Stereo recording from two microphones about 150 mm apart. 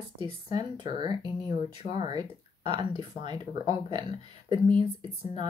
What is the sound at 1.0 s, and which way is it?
Speech, 30° right (ahead or behind).